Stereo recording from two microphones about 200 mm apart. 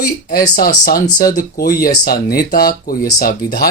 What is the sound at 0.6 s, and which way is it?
Speech, 45° left (ahead or behind).